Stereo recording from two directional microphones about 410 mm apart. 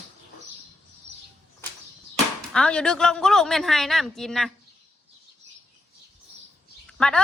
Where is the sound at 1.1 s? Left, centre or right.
Centre.